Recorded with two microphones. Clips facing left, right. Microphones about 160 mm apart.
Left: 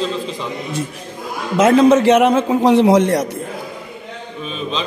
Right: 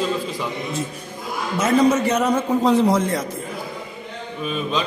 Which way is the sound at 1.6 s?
90° left.